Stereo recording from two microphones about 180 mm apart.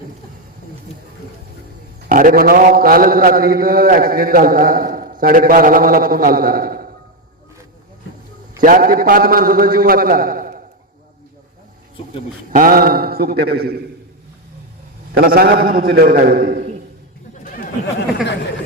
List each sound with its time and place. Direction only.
2.0 s mantra: 50° right (ahead or behind)
8.6 s mantra: 50° right (ahead or behind)
12.5 s a man's voice: 50° right (ahead or behind)
15.1 s a man's voice: 55° right (ahead or behind)